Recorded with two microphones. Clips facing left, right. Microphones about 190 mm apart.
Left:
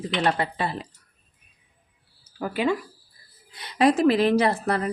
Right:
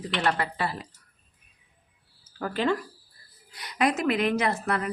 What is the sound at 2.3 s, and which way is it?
Speech, 10° left (ahead or behind).